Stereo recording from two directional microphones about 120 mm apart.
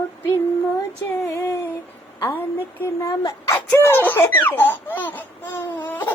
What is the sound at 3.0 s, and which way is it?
Speech, 25° left (ahead or behind).